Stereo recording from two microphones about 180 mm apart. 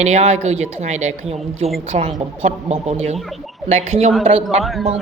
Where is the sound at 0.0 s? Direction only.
40° right (ahead or behind).